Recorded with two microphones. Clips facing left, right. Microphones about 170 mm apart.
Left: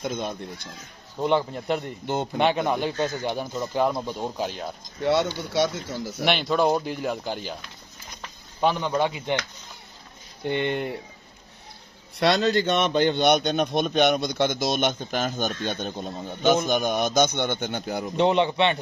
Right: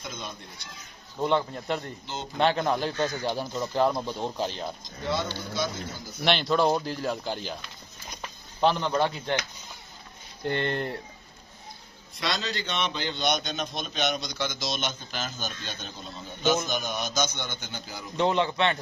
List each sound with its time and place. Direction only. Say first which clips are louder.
0.0 s speech: left 10 dB; 50° left (ahead or behind)
1.2 s speech: left 3 dB; 10° left (ahead or behind)
3.0 s a man's voice: left 2 dB; 25° left (ahead or behind)
3.3 s speech: left 1 dB; 10° left (ahead or behind)
5.0 s speech: left 7 dB; 70° left (ahead or behind)
6.2 s speech: left 1 dB; 10° left (ahead or behind)
8.5 s speech: left 1 dB; 10° left (ahead or behind)
10.4 s speech: left 3 dB; 5° left (ahead or behind)
12.2 s a man's voice: left 11 dB; 55° left (ahead or behind)
18.1 s a man's voice: left 4 dB; 20° left (ahead or behind)